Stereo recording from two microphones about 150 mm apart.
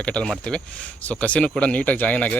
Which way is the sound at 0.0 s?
5° left (ahead or behind).